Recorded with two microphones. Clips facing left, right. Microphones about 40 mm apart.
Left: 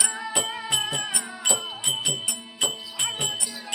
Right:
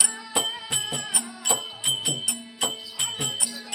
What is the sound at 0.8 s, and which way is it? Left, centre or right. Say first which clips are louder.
Music: left 3 dB; left.